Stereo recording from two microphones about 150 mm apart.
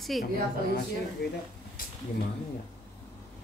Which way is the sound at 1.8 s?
75° left (ahead or behind).